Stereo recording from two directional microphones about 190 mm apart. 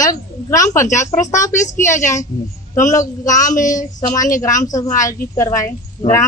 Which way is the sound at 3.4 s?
45° left (ahead or behind).